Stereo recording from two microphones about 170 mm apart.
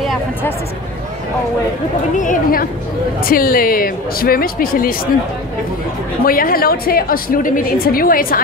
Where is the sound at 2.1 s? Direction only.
50° left (ahead or behind).